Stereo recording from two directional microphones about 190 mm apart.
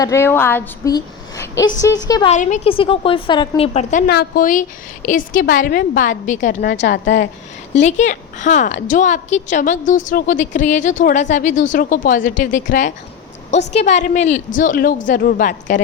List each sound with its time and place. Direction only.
0.0 s a woman's voice: 15° left (ahead or behind)
0.9 s a sound: 20° left (ahead or behind)
2.0 s a woman's voice: 20° left (ahead or behind)
2.3 s a woman's voice: 40° left (ahead or behind)
4.0 s a woman's voice: 55° left (ahead or behind)
6.6 s a woman's voice: 60° left (ahead or behind)
7.8 s a woman's voice: 40° left (ahead or behind)